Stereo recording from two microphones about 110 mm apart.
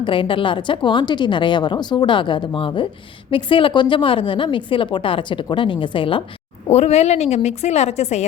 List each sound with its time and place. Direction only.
0.0 s a woman's voice: 50° left (ahead or behind)
6.7 s a woman's voice: 75° left (ahead or behind)